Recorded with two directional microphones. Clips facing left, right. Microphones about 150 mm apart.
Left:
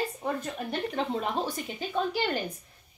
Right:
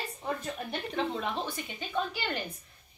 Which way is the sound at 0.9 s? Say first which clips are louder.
Even; 40° left (ahead or behind).